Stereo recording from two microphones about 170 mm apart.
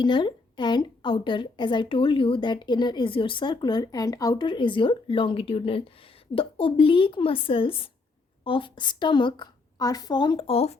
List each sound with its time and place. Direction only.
0.0 s a woman's voice: 25° left (ahead or behind)